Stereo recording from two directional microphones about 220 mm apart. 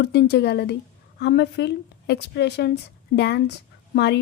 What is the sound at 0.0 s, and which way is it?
A woman's voice, 50° left (ahead or behind).